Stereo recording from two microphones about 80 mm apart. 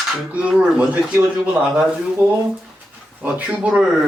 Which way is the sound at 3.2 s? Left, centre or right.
Centre.